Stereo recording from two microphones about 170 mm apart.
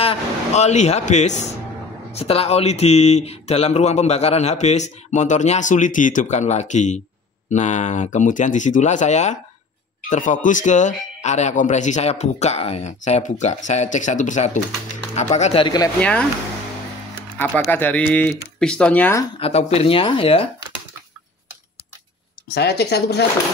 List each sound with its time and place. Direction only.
0.0 s speech: 35° left (ahead or behind)
15.6 s speech: 25° left (ahead or behind)
16.0 s speech: 10° left (ahead or behind)
17.6 s speech: 10° left (ahead or behind)
19.3 s speech: 35° left (ahead or behind)
22.5 s speech: 75° left (ahead or behind)